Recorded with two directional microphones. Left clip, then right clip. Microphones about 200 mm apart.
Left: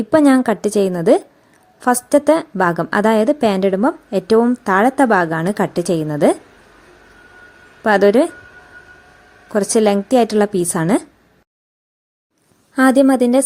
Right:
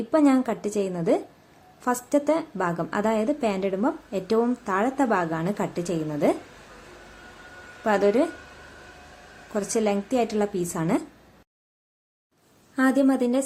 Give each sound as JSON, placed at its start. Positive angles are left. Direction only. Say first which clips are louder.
{"t": 0.1, "sound": "a woman's voice", "louder": "left 9 dB", "side_deg": 40}
{"t": 7.9, "sound": "a woman's voice", "louder": "left 9 dB", "side_deg": 40}
{"t": 9.5, "sound": "a woman's voice", "louder": "left 10 dB", "side_deg": 40}
{"t": 12.7, "sound": "a woman's voice", "louder": "left 10 dB", "side_deg": 40}